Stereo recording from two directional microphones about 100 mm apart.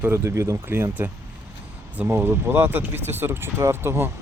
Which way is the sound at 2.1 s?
25° right (ahead or behind).